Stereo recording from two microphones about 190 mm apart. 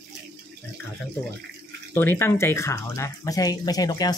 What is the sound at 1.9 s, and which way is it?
Speech, 15° left (ahead or behind).